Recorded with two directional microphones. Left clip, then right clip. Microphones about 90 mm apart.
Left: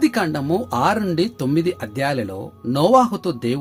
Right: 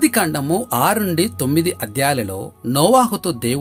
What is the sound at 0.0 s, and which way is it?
Speech, 20° right (ahead or behind).